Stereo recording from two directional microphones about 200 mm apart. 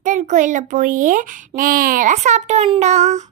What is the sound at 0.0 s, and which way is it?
A child's voice, 40° right (ahead or behind).